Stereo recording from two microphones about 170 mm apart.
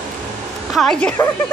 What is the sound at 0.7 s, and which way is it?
Speech, 5° left (ahead or behind).